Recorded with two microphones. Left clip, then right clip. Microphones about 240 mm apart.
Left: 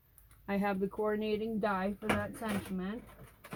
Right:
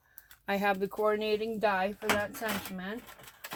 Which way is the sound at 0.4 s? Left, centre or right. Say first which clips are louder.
Right 5 dB; right.